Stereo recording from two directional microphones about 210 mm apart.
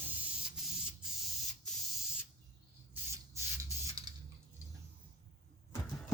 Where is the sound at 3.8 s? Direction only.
20° right (ahead or behind).